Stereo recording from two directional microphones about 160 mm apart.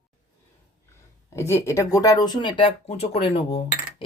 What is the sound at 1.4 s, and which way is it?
Speech, 20° left (ahead or behind).